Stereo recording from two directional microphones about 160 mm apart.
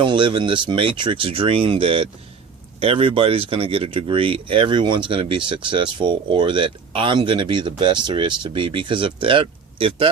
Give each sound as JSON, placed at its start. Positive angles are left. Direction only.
{"t": 0.0, "sound": "speech", "side_deg": -30}